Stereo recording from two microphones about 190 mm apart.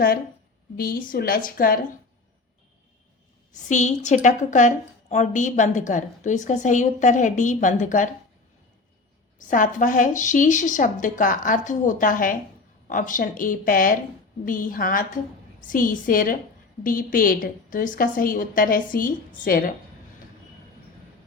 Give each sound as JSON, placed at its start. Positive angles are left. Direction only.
{"t": 0.8, "sound": "speech", "side_deg": 50}
{"t": 3.7, "sound": "a woman's voice", "side_deg": 40}
{"t": 9.4, "sound": "speech", "side_deg": 45}